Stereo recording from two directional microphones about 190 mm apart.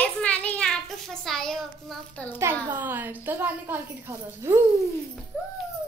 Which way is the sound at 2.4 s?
10° right (ahead or behind).